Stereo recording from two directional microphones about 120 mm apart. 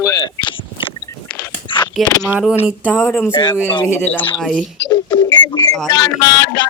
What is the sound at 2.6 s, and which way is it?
Speech, 5° right (ahead or behind).